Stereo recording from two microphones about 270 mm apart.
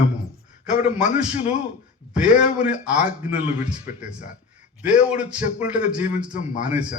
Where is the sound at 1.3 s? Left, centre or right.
Left.